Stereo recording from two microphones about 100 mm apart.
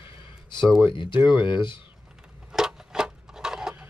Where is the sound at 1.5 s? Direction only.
55° left (ahead or behind).